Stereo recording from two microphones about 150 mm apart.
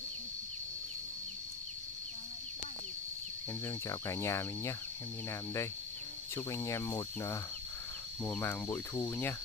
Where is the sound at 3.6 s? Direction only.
20° left (ahead or behind).